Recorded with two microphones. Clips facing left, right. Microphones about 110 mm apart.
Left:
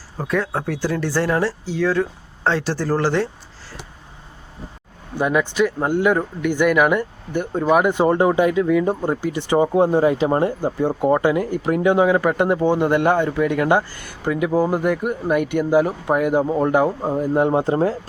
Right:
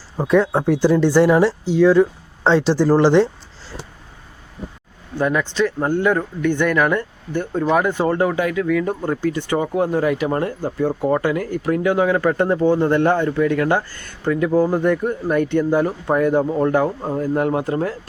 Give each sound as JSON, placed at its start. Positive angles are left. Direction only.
{"t": 0.2, "sound": "speech", "side_deg": -20}
{"t": 5.1, "sound": "speech", "side_deg": 15}